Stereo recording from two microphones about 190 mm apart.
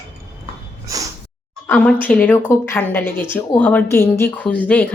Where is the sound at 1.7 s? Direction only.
10° left (ahead or behind).